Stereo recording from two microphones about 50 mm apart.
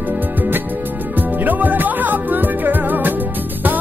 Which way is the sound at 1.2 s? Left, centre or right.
Right.